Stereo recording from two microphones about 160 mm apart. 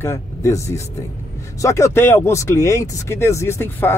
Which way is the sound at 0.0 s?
15° left (ahead or behind).